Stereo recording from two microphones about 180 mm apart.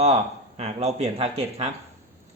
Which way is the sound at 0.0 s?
35° right (ahead or behind).